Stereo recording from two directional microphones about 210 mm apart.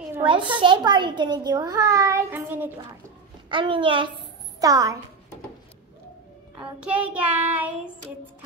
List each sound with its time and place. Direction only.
0.2 s a child's voice: 25° right (ahead or behind)
3.4 s a child's voice: 25° right (ahead or behind)
4.6 s child singing: 15° right (ahead or behind)
6.5 s child singing: 5° right (ahead or behind)